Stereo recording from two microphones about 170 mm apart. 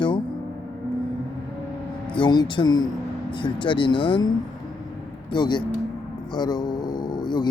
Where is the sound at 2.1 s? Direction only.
25° left (ahead or behind).